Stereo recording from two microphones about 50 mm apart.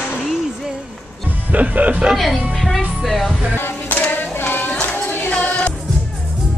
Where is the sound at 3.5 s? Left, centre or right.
Left.